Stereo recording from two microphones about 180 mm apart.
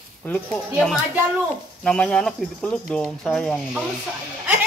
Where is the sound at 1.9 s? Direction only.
5° left (ahead or behind).